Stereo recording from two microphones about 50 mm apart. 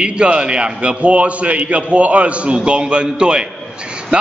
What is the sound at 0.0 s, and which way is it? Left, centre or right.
A man's voice, centre.